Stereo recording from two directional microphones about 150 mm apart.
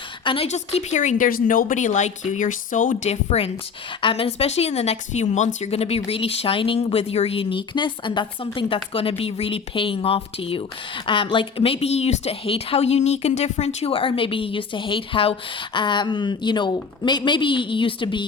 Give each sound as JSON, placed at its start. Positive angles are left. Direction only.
{"t": 0.5, "sound": "a woman's voice", "side_deg": 50}